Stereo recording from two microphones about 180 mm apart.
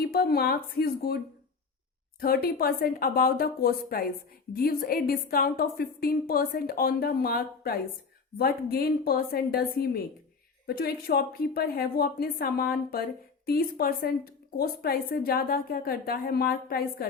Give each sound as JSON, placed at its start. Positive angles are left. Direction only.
{"t": 0.0, "sound": "a woman's voice", "side_deg": 60}
{"t": 2.2, "sound": "a woman's voice", "side_deg": 55}